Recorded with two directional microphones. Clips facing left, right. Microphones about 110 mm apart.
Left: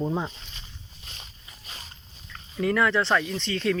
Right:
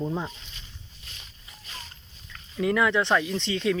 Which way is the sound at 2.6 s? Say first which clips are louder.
Even; 15° right (ahead or behind).